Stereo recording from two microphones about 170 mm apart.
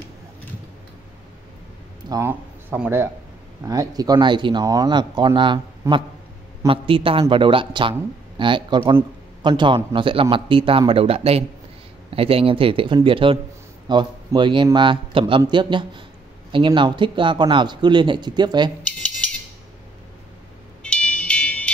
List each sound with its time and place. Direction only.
2.0 s speech: 15° right (ahead or behind)
20.8 s music: 5° left (ahead or behind)